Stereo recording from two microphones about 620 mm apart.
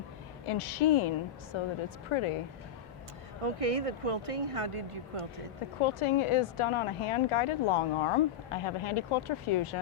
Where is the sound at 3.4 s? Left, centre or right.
Right.